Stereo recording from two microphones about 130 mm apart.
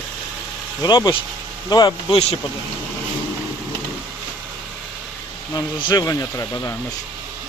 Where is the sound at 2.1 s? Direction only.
50° left (ahead or behind).